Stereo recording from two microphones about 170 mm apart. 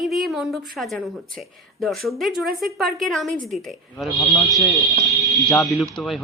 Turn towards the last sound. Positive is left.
turn(degrees=0)  # may be behind; listen again after turning